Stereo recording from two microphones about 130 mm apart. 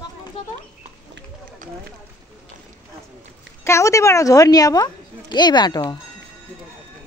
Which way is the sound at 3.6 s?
20° left (ahead or behind).